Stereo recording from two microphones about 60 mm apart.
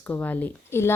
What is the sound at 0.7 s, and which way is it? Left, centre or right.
Speech, left.